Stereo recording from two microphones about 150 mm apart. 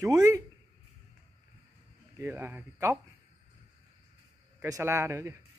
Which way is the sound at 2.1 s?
15° right (ahead or behind).